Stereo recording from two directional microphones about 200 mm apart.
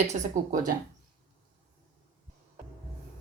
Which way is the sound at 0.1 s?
35° right (ahead or behind).